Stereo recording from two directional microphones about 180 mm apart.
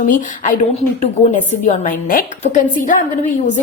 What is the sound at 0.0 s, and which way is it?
A woman's voice, 45° left (ahead or behind).